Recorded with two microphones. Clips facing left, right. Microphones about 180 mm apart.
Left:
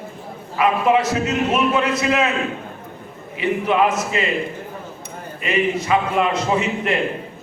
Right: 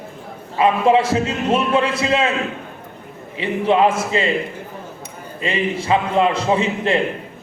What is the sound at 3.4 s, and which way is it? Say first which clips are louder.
Speech: right 2 dB; 30° right (ahead or behind).